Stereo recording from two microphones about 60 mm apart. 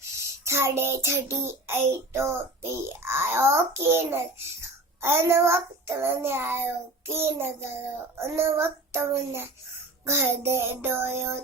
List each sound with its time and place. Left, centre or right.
0.0 s child singing: right
4.6 s a child's voice: right
8.2 s child singing: right
10.8 s a sound: right